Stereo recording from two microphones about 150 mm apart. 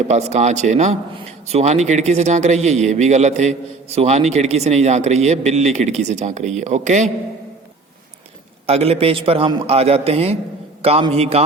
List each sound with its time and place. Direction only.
0.1 s a man's voice: 50° right (ahead or behind)
8.6 s a man's voice: 45° right (ahead or behind)